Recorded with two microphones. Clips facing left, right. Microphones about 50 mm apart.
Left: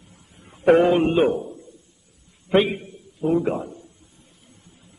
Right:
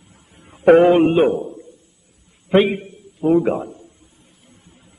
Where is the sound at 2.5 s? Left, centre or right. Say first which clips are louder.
Right 4 dB; centre.